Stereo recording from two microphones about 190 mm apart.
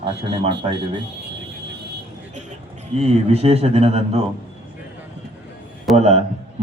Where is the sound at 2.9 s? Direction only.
35° right (ahead or behind).